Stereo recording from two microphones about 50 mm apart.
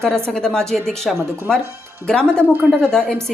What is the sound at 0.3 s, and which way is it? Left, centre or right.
Speech, centre.